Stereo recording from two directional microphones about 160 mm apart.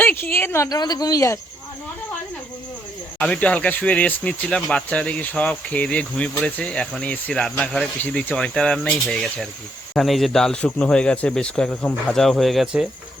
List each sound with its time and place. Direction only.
0.0 s speech: 10° left (ahead or behind)
3.2 s speech: 10° left (ahead or behind)